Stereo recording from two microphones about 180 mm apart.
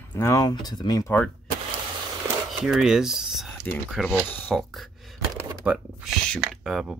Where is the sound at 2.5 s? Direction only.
Centre (ahead or behind).